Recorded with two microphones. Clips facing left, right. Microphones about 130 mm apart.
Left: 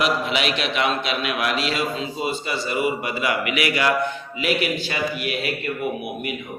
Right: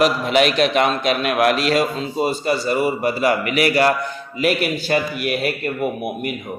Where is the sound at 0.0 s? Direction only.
45° right (ahead or behind).